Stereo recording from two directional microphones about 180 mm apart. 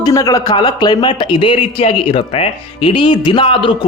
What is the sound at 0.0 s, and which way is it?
Speech, 20° left (ahead or behind).